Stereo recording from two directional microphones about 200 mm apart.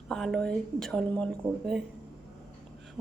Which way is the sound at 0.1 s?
Centre (ahead or behind).